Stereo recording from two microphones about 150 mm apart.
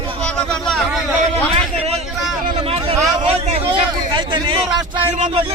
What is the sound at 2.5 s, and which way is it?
Vehicle, 40° right (ahead or behind).